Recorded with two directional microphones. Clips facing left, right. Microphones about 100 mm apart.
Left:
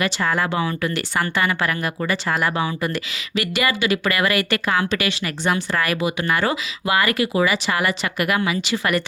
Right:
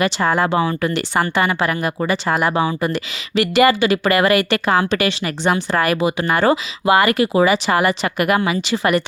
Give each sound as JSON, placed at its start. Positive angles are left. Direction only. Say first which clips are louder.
{"t": 0.0, "sound": "speech", "louder": "right 4 dB", "side_deg": -30}